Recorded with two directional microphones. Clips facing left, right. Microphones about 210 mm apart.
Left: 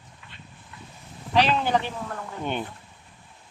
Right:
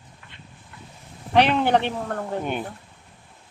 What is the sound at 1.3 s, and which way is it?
Speech, 60° right (ahead or behind).